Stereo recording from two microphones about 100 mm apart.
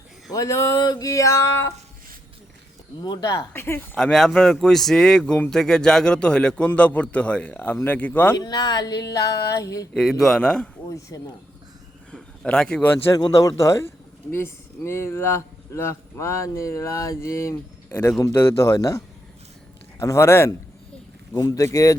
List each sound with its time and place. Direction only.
0.3 s speech: 40° left (ahead or behind)
3.0 s speech: 40° left (ahead or behind)
3.5 s speech: 25° left (ahead or behind)
3.9 s a man's voice: 5° left (ahead or behind); by 8.4 s 20° left (ahead or behind)
8.4 s speech: 45° left (ahead or behind)
9.9 s a man's voice: 5° left (ahead or behind)
11.1 s speech: 35° left (ahead or behind)
12.1 s a man's voice: 5° left (ahead or behind)
13.1 s speech: 35° left (ahead or behind)